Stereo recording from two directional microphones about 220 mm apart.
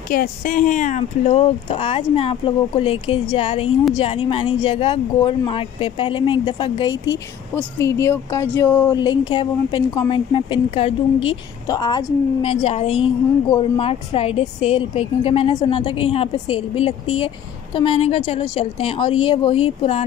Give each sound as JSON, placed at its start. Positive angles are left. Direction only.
{"t": 0.1, "sound": "a woman's voice", "side_deg": 40}